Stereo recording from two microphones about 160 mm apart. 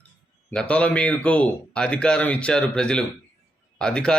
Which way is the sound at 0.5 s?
5° left (ahead or behind).